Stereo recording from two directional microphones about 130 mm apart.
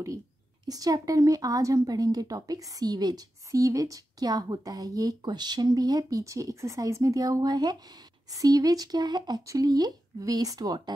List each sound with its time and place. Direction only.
0.7 s speech: 30° right (ahead or behind)